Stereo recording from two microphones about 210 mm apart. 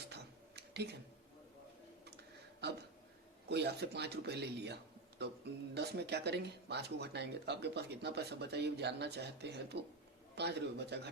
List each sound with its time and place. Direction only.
0.1 s tick-tock: 50° right (ahead or behind)
3.5 s a man's voice: 50° right (ahead or behind)